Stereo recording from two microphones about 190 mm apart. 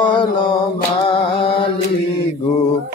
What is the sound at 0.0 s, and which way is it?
Music, 25° left (ahead or behind).